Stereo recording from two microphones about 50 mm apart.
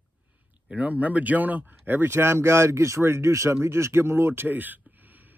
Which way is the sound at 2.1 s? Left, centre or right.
Right.